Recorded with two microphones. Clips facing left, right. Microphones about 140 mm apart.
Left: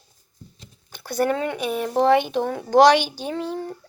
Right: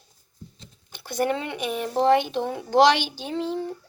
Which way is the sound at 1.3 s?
45° left (ahead or behind).